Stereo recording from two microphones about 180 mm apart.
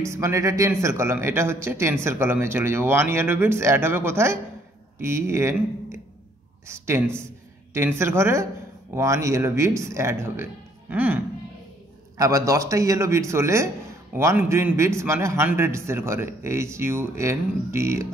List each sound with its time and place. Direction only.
0.0 s a man's voice: 15° right (ahead or behind)
7.7 s a man's voice: 15° right (ahead or behind)
12.2 s a man's voice: 20° right (ahead or behind)